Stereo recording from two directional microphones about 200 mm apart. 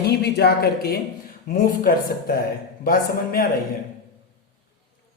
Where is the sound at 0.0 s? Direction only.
55° left (ahead or behind).